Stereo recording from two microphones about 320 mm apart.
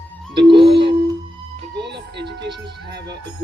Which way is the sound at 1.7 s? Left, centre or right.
Right.